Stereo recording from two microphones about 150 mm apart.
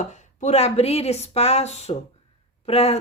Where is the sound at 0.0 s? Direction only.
55° left (ahead or behind).